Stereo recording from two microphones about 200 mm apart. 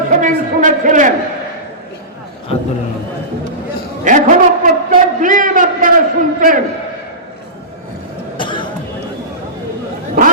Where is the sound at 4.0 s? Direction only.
40° right (ahead or behind).